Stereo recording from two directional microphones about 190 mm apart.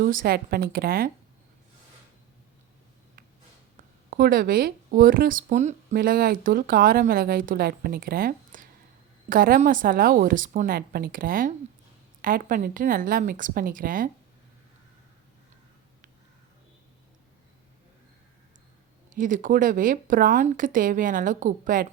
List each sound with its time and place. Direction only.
0.0 s speech: 45° right (ahead or behind)
4.1 s speech: 50° right (ahead or behind)
19.1 s speech: 45° right (ahead or behind)